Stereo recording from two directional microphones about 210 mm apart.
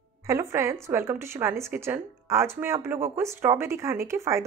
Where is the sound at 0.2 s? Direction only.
15° right (ahead or behind).